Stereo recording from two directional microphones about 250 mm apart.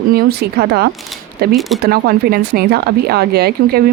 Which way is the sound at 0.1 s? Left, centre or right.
Right.